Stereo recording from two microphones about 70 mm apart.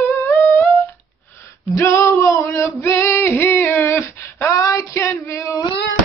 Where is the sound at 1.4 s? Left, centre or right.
Left.